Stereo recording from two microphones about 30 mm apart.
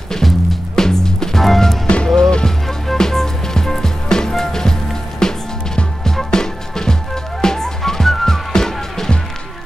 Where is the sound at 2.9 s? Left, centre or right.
Centre.